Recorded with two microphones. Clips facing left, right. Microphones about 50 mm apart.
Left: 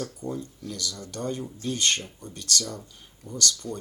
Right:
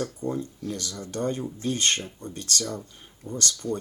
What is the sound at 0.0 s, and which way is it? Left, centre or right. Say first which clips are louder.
Speech: right 3 dB; right.